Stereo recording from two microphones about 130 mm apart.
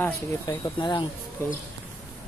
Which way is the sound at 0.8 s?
35° left (ahead or behind).